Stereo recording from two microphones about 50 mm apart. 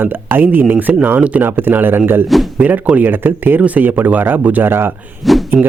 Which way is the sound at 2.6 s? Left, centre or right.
Right.